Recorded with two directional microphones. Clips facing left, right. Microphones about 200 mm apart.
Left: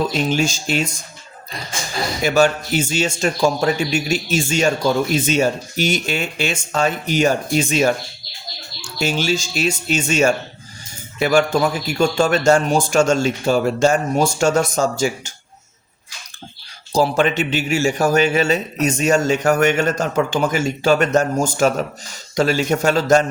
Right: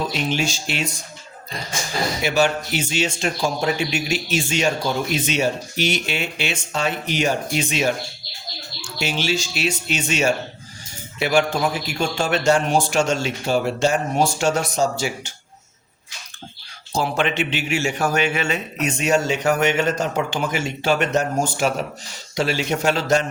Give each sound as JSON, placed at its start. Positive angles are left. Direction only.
{"t": 0.1, "sound": "a man's voice", "side_deg": 45}
{"t": 2.2, "sound": "a man's voice", "side_deg": 45}
{"t": 16.9, "sound": "a man's voice", "side_deg": 40}